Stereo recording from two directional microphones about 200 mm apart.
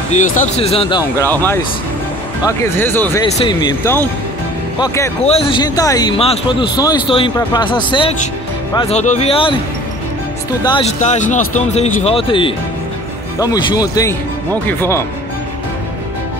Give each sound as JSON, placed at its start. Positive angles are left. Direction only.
{"t": 0.1, "sound": "speech", "side_deg": 30}
{"t": 1.2, "sound": "speech", "side_deg": 10}
{"t": 5.2, "sound": "speech", "side_deg": 30}
{"t": 10.6, "sound": "speech", "side_deg": 20}
{"t": 11.0, "sound": "speech", "side_deg": 35}